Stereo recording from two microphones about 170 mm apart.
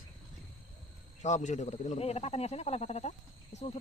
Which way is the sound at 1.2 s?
45° left (ahead or behind).